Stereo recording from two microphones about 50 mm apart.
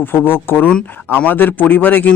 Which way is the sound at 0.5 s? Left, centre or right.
Left.